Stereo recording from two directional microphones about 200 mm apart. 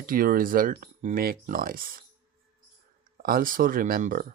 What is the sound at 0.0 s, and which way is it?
Speech, 45° right (ahead or behind).